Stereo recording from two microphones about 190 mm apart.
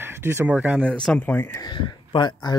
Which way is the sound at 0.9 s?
5° left (ahead or behind).